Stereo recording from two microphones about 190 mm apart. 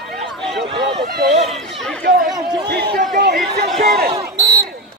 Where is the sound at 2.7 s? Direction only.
50° right (ahead or behind).